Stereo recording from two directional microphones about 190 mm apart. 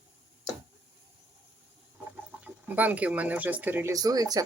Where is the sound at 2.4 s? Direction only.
10° right (ahead or behind).